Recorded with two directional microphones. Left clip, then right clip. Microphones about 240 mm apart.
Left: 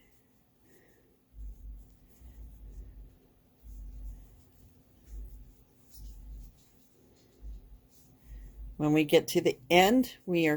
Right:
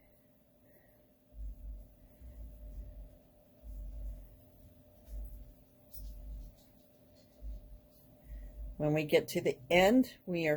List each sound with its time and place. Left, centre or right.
8.8 s speech: left